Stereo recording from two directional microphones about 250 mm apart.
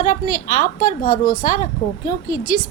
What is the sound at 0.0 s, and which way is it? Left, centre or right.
A woman's voice, left.